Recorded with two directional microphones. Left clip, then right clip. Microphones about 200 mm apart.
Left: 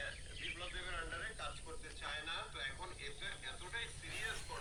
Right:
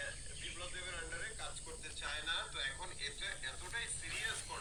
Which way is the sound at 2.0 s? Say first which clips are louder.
Right 4 dB; 15° left (ahead or behind).